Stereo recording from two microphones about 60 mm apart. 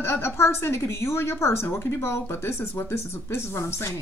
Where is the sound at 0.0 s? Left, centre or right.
Left.